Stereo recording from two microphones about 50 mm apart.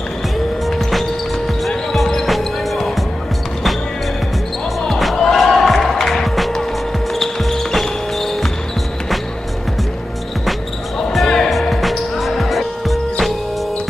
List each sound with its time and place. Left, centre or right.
0.7 s music: centre
1.9 s basketball bounce: centre
4.8 s music: centre
11.0 s music: centre